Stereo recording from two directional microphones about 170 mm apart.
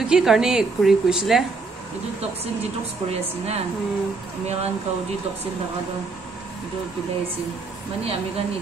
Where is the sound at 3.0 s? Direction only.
40° right (ahead or behind).